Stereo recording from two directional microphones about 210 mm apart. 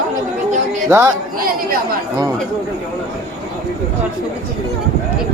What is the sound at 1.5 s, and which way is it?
Chatter, 45° right (ahead or behind).